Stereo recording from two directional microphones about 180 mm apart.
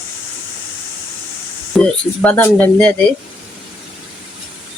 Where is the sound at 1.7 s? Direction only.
5° left (ahead or behind).